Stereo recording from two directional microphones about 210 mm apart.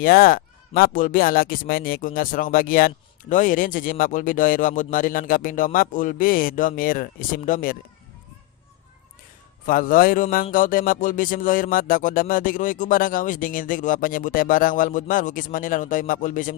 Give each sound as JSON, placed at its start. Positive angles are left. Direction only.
{"t": 0.0, "sound": "speech", "side_deg": 45}
{"t": 9.6, "sound": "speech", "side_deg": 40}